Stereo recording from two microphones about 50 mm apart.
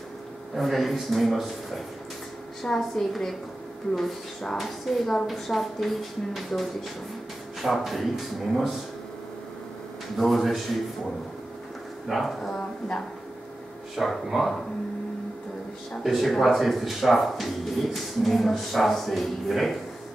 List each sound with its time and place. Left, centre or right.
0.6 s speech: centre
10.1 s speech: centre
12.1 s speech: centre
12.5 s speech: centre
13.9 s speech: centre
15.9 s speech: centre